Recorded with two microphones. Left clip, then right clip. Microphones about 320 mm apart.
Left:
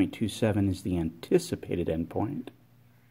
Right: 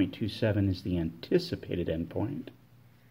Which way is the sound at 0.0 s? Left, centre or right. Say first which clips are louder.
Left 2 dB; left.